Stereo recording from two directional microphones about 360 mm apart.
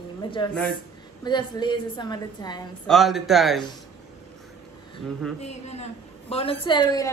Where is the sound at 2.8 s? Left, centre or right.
Centre.